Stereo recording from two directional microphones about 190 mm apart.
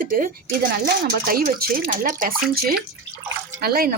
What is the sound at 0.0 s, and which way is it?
Speech, 45° right (ahead or behind).